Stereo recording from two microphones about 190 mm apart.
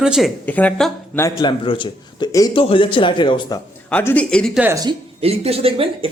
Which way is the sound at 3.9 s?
10° left (ahead or behind).